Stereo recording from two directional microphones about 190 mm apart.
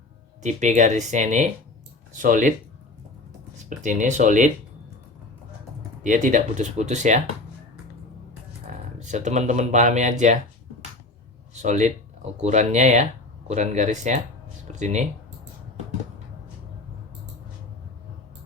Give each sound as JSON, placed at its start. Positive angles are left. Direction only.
{"t": 0.4, "sound": "speech", "side_deg": -40}
{"t": 3.7, "sound": "speech", "side_deg": -40}
{"t": 6.0, "sound": "speech", "side_deg": -40}
{"t": 9.0, "sound": "speech", "side_deg": -40}
{"t": 11.6, "sound": "speech", "side_deg": -40}